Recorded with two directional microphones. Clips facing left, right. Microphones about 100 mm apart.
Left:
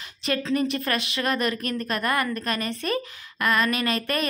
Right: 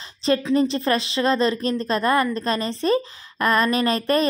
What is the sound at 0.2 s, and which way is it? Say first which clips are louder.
A woman's voice: right 5 dB; 30° right (ahead or behind).